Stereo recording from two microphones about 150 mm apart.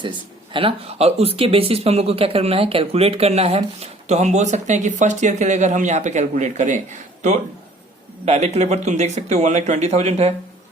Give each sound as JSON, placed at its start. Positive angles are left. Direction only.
{"t": 0.5, "sound": "speech", "side_deg": -40}
{"t": 8.2, "sound": "speech", "side_deg": -45}